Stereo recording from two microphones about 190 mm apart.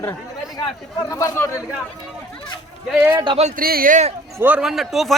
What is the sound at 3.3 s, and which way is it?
Speech, 35° right (ahead or behind).